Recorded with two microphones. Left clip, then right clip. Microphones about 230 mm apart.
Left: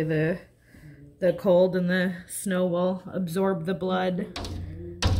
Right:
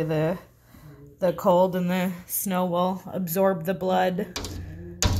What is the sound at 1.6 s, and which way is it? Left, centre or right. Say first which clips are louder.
Speech: even; right.